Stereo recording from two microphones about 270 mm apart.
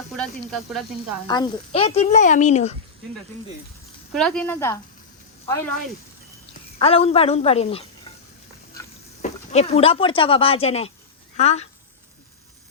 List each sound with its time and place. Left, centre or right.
0.1 s speech: centre
1.3 s speech: centre
4.1 s speech: centre
6.7 s speech: left
9.2 s speech: left